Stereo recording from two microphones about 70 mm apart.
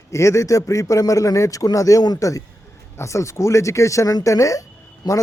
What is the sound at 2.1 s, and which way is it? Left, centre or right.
A man's voice, left.